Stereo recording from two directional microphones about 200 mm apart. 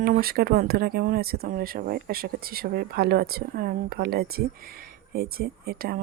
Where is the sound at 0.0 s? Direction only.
50° right (ahead or behind).